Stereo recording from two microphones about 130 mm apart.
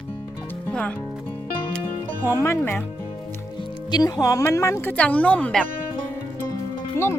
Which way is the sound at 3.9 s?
30° left (ahead or behind).